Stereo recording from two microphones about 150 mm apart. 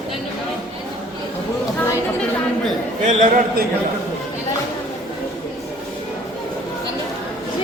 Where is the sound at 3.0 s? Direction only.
55° right (ahead or behind).